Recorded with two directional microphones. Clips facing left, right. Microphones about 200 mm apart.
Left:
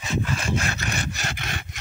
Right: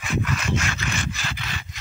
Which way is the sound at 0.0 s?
25° left (ahead or behind).